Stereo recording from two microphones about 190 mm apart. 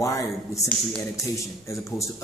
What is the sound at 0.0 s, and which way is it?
A man's voice, 15° left (ahead or behind).